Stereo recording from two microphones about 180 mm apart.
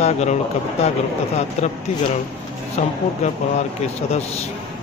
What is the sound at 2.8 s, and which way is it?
A man's voice, 40° left (ahead or behind).